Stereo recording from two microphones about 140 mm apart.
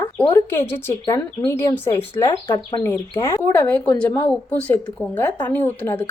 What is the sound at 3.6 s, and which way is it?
A woman's voice, 10° left (ahead or behind).